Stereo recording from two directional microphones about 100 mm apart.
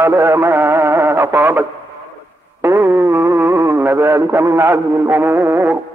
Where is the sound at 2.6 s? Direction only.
20° right (ahead or behind).